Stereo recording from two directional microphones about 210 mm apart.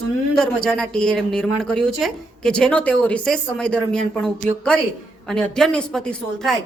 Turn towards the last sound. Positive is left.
turn(degrees=5)  # may be behind; listen again after turning